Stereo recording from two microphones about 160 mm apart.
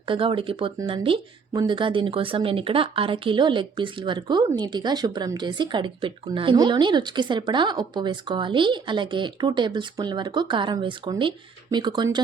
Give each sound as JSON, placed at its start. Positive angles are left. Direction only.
{"t": 0.0, "sound": "speech", "side_deg": -35}